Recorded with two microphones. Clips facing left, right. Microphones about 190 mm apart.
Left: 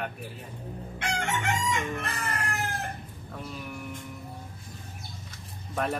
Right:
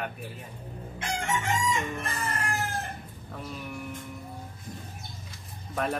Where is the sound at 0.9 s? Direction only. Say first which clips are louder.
Even; 65° left (ahead or behind).